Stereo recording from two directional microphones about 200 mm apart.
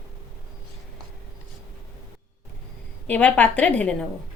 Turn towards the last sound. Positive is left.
turn(degrees=5)  # may be behind; listen again after turning